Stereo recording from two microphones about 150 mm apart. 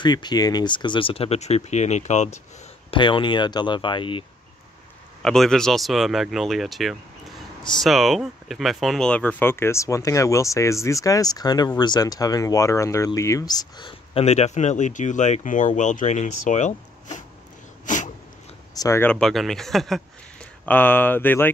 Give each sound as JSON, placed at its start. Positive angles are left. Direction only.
{"t": 0.0, "sound": "speech", "side_deg": 30}
{"t": 2.9, "sound": "speech", "side_deg": 35}
{"t": 5.2, "sound": "speech", "side_deg": 5}
{"t": 14.2, "sound": "speech", "side_deg": 45}
{"t": 17.8, "sound": "a sound", "side_deg": 55}
{"t": 18.8, "sound": "speech", "side_deg": 15}
{"t": 20.6, "sound": "speech", "side_deg": 10}